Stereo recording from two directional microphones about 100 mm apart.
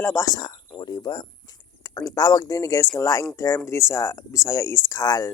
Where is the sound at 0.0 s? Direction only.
25° left (ahead or behind).